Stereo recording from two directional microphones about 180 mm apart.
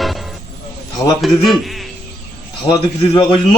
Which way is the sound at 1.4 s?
Centre (ahead or behind).